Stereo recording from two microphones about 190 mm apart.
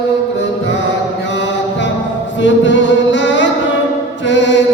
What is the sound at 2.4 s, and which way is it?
Music, 75° left (ahead or behind).